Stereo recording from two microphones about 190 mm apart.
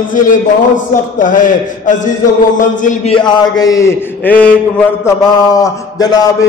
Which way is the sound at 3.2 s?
20° left (ahead or behind).